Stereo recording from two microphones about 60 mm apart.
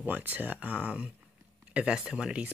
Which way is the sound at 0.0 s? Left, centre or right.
Right.